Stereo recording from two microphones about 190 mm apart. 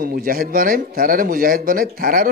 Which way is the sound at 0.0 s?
50° right (ahead or behind).